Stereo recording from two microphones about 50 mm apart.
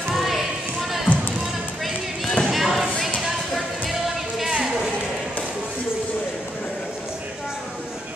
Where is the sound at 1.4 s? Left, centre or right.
Centre.